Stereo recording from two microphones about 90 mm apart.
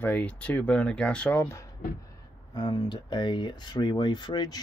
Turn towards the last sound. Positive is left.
turn(degrees=50)  # may be behind; listen again after turning